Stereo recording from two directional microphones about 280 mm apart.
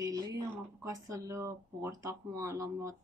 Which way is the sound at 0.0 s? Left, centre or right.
Centre.